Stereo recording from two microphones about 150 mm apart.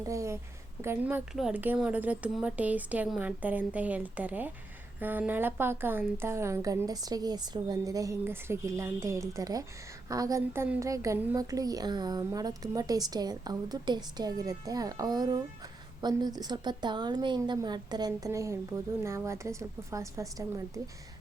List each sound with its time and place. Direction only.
0.1 s a woman's voice: 20° right (ahead or behind)